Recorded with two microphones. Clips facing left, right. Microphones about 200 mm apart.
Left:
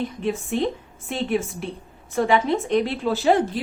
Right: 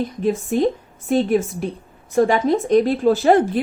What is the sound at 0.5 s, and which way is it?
A woman's voice, 40° right (ahead or behind).